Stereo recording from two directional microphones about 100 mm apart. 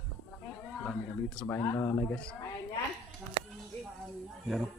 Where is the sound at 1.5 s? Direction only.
25° left (ahead or behind).